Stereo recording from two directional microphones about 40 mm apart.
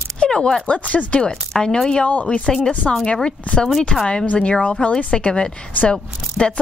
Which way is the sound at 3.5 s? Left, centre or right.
Left.